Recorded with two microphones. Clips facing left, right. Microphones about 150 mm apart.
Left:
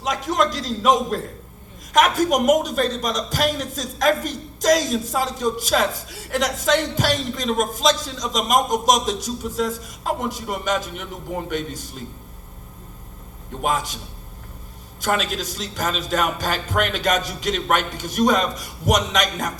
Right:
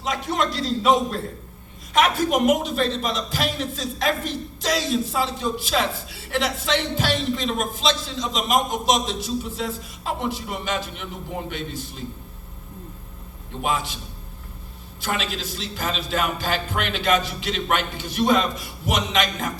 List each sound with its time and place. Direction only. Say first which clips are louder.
0.0 s a man's voice: left 3 dB; 45° left (ahead or behind)
13.6 s a man's voice: left 2 dB; 45° left (ahead or behind)
15.0 s a man's voice: left 4 dB; 45° left (ahead or behind)